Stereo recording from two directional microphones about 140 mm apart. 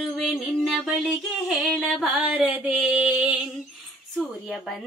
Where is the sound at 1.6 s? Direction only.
5° left (ahead or behind).